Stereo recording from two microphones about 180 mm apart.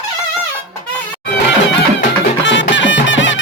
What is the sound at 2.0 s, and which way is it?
Music, 80° left.